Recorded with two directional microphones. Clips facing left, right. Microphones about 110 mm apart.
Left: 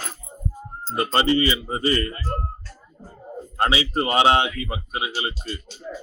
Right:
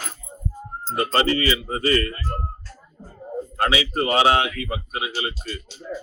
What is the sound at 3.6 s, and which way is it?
Speech, 25° left (ahead or behind).